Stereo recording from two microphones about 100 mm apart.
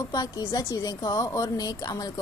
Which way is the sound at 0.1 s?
40° left (ahead or behind).